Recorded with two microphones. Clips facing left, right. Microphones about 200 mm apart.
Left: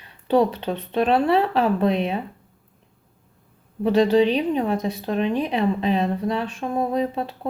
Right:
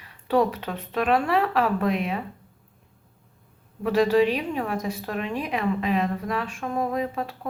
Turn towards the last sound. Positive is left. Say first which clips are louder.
# left 4 dB
turn(degrees=25)  # may be behind; listen again after turning